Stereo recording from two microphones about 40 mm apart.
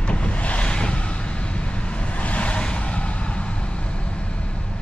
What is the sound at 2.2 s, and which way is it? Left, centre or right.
Vehicle, left.